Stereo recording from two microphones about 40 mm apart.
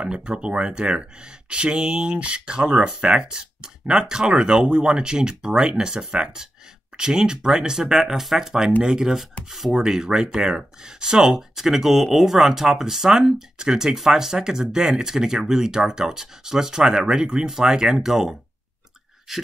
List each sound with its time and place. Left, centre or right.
0.3 s speech: right; by 19.4 s centre